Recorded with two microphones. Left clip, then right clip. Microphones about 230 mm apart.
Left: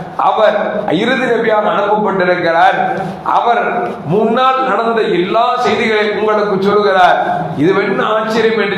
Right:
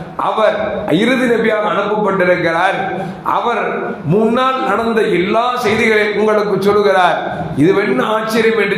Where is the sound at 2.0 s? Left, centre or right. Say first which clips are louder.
Left 1 dB; right.